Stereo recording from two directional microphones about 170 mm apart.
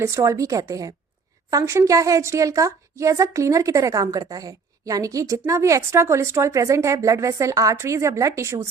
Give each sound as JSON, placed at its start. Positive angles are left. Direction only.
{"t": 0.0, "sound": "a woman's voice", "side_deg": -15}